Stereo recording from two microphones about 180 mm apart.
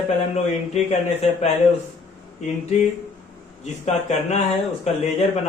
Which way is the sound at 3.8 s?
40° left (ahead or behind).